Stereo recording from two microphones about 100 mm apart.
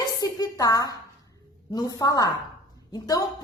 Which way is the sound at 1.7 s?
40° left (ahead or behind).